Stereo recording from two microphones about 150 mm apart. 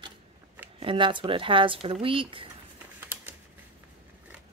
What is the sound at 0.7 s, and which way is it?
Speech, 35° right (ahead or behind).